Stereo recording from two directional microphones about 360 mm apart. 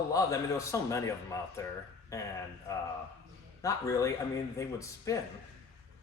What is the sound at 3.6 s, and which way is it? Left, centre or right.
A man's voice, centre.